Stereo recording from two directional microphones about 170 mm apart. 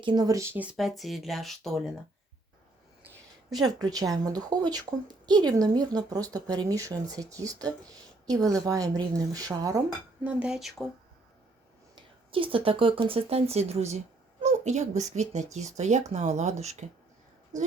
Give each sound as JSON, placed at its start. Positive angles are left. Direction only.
{"t": 0.0, "sound": "speech", "side_deg": -25}
{"t": 3.6, "sound": "a woman's voice", "side_deg": -25}
{"t": 10.2, "sound": "speech", "side_deg": -5}
{"t": 11.9, "sound": "speech", "side_deg": -30}
{"t": 17.5, "sound": "speech", "side_deg": -20}